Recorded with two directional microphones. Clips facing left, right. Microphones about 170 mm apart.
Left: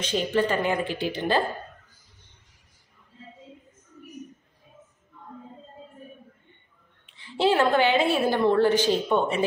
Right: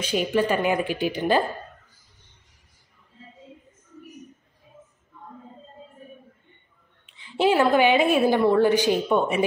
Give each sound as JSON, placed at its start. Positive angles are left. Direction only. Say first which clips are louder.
{"t": 0.0, "sound": "a woman's voice", "louder": "right 1 dB", "side_deg": -10}
{"t": 7.2, "sound": "a woman's voice", "louder": "right 2 dB", "side_deg": -15}